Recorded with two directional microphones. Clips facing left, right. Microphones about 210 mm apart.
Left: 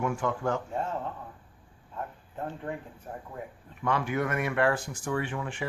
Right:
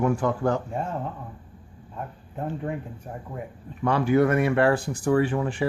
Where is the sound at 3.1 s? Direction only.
20° right (ahead or behind).